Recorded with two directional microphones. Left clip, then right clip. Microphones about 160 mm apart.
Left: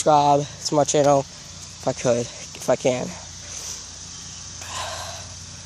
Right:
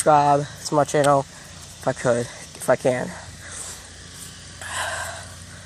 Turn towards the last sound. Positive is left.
turn(degrees=0)  # may be behind; listen again after turning